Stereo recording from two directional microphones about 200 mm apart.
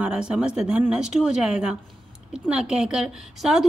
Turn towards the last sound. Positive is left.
turn(degrees=0)  # may be behind; listen again after turning